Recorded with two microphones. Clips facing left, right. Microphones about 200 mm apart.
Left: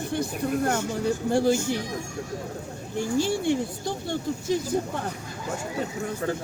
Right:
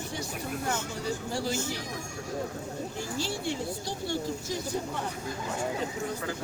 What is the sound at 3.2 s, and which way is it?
Speech, 55° left (ahead or behind).